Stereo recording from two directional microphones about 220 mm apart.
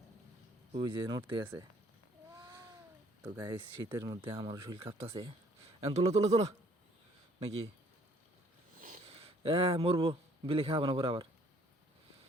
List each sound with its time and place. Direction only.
0.7 s speech: 20° right (ahead or behind)
2.4 s a sound: 15° right (ahead or behind)
3.4 s speech: 15° right (ahead or behind)
4.8 s speech: 25° right (ahead or behind)
9.0 s a man's voice: 25° right (ahead or behind)